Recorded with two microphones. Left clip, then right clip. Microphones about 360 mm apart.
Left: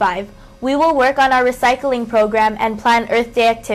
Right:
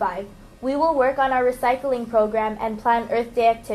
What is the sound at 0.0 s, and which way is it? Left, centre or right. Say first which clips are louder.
A woman's voice: left 8 dB; left.